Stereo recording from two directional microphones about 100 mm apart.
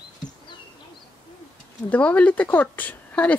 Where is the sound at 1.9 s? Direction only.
15° left (ahead or behind).